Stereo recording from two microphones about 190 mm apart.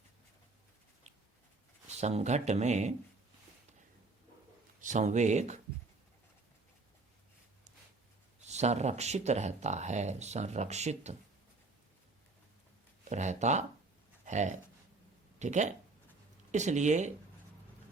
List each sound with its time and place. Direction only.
2.0 s speech: 35° right (ahead or behind)
4.8 s speech: 40° right (ahead or behind)
8.4 s speech: 35° right (ahead or behind)
13.1 s speech: 40° right (ahead or behind)